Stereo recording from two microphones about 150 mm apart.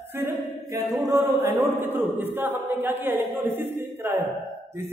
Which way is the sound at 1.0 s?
20° right (ahead or behind).